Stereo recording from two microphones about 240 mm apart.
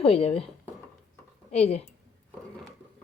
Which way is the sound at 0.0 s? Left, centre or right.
Left.